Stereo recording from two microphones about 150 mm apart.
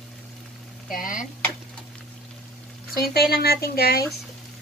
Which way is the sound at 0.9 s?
65° left (ahead or behind).